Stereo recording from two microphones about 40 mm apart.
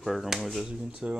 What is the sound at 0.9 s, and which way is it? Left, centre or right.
Speech, right.